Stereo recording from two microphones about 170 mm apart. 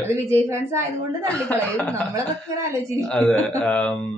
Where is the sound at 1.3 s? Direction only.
10° left (ahead or behind).